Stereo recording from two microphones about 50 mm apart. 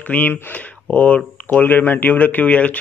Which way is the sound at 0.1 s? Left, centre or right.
Left.